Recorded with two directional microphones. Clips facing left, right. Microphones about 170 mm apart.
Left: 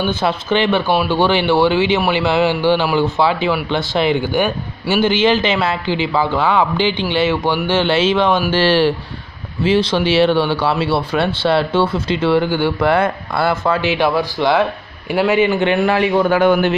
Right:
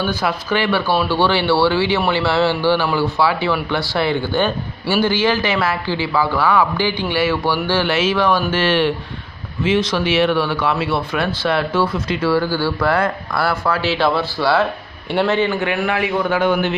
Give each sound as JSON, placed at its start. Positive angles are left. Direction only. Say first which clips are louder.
{"t": 0.0, "sound": "speech", "louder": "left 2 dB", "side_deg": 25}
{"t": 8.5, "sound": "a man's voice", "louder": "left 3 dB", "side_deg": 35}
{"t": 15.6, "sound": "a man's voice", "louder": "left 5 dB", "side_deg": 30}
{"t": 16.3, "sound": "a man's voice", "louder": "left 2 dB", "side_deg": 50}